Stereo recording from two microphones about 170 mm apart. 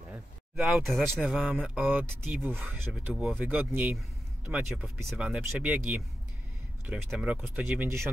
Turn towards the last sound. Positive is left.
turn(degrees=-10)  # may be behind; listen again after turning